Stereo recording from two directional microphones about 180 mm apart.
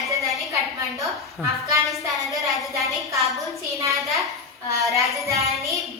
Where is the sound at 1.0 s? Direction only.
Centre (ahead or behind).